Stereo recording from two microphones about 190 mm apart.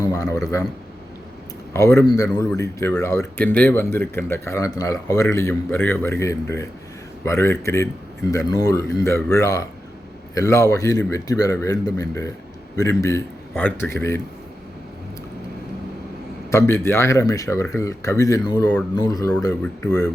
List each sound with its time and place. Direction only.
0.0 s a man's voice: 20° left (ahead or behind)
1.7 s speech: 15° left (ahead or behind)
16.5 s speech: 15° left (ahead or behind)
19.6 s speech: 5° left (ahead or behind)